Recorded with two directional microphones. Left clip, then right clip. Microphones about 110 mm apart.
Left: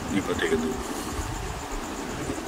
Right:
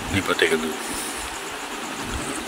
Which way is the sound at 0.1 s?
15° left (ahead or behind).